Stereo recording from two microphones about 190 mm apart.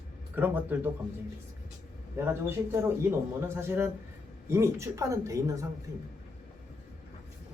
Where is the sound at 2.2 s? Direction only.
15° right (ahead or behind).